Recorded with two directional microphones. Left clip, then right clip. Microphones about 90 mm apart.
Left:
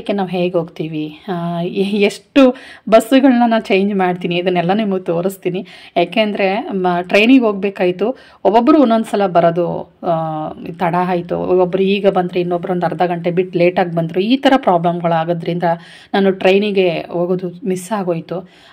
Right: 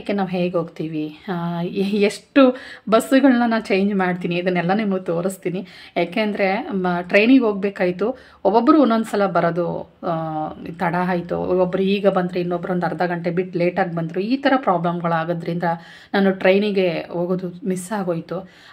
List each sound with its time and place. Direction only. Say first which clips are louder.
0.0 s a woman's voice: left 5 dB; 30° left (ahead or behind); by 14.8 s 65° left (ahead or behind)
14.8 s a woman's voice: left 6 dB; 35° left (ahead or behind)